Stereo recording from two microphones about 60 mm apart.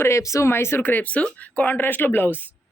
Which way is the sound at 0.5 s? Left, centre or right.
Left.